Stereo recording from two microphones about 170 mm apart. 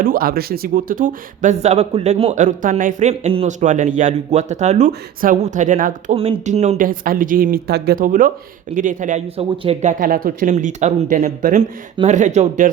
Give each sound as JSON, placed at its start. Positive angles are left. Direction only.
{"t": 0.0, "sound": "speech", "side_deg": -60}
{"t": 6.1, "sound": "speech", "side_deg": -35}
{"t": 9.9, "sound": "speech", "side_deg": -55}